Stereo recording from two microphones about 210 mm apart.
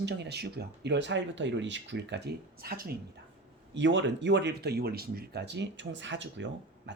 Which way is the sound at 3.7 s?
60° right (ahead or behind).